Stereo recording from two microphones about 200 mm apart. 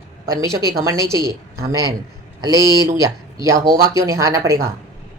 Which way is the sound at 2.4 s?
15° right (ahead or behind).